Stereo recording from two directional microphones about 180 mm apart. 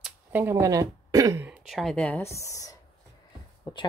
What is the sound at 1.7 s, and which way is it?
Speech, centre (ahead or behind).